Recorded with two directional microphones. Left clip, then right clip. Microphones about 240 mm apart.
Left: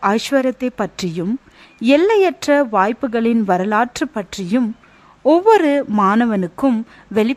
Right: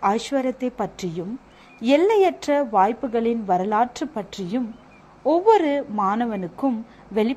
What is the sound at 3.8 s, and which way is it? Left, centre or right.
Speech, left.